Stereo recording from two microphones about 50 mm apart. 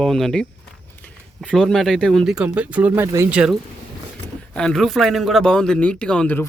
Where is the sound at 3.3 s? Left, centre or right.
Right.